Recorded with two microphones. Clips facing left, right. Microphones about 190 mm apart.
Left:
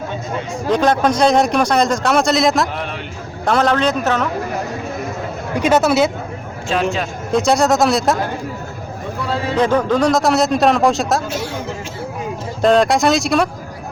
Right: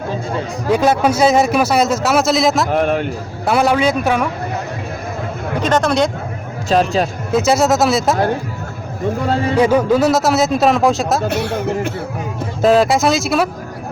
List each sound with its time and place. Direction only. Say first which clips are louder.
0.7 s a man's voice: right 1 dB; 10° right (ahead or behind)
2.7 s a man's voice: right 11 dB; 50° right (ahead or behind)
3.4 s a man's voice: right 1 dB; 10° right (ahead or behind)
5.5 s speech: left 1 dB; 10° left (ahead or behind)
6.7 s speech: right 4 dB; 35° right (ahead or behind)
7.3 s a man's voice: right 1 dB; 5° right (ahead or behind)
9.6 s a man's voice: right 2 dB; 10° right (ahead or behind)
11.3 s speech: right 5 dB; 60° right (ahead or behind)
12.6 s a man's voice: right 1 dB; 5° right (ahead or behind)